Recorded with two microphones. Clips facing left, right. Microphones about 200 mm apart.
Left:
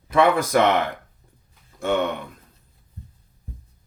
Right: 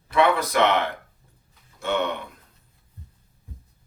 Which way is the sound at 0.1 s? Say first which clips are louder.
Left 3 dB; 45° left (ahead or behind).